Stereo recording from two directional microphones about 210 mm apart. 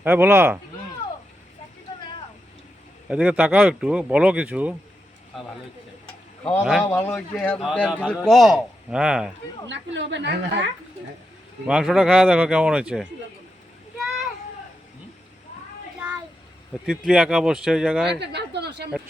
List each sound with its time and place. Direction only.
0.0 s speech: 10° right (ahead or behind)
3.1 s speech: 5° right (ahead or behind)
6.1 s tick-tock: 5° left (ahead or behind)
6.6 s speech: 5° right (ahead or behind)
6.8 s speech: 10° left (ahead or behind)
9.6 s a woman's voice: 60° right (ahead or behind)
11.6 s speech: 5° right (ahead or behind)
16.8 s speech: 5° right (ahead or behind)
18.1 s speech: 55° right (ahead or behind)